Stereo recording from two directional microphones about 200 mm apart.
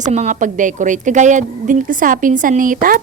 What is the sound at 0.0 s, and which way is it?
A woman's voice, 35° right (ahead or behind).